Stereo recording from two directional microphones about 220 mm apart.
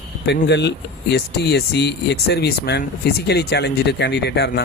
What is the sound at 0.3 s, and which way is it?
Speech, 50° left (ahead or behind).